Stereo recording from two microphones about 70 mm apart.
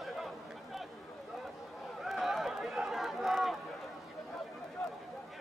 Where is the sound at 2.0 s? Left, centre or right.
Centre.